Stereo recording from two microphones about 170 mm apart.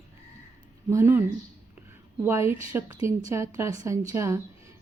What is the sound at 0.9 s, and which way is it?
A woman's voice, 15° right (ahead or behind).